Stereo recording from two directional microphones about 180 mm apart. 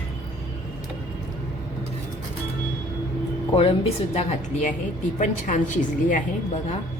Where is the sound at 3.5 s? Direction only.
30° left (ahead or behind).